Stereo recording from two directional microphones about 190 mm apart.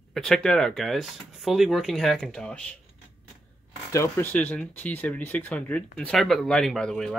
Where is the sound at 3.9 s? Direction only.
10° left (ahead or behind).